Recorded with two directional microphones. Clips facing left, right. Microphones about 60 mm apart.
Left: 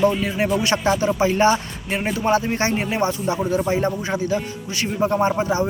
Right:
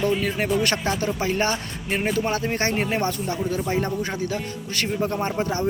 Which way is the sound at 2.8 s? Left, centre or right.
Centre.